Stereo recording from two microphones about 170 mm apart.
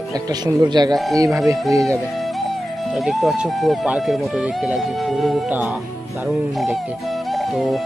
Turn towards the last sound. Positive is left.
turn(degrees=0)  # may be behind; listen again after turning